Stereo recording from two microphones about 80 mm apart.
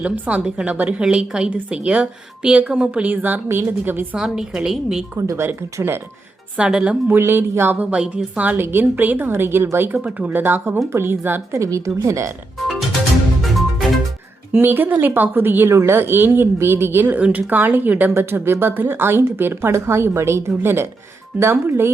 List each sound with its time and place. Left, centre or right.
0.0 s a woman's voice: centre
4.2 s a woman's voice: centre
5.1 s speech: right
6.6 s a woman's voice: centre
7.1 s a woman's voice: right
11.6 s speech: right
13.4 s music: centre
14.6 s a woman's voice: right
17.2 s a woman's voice: centre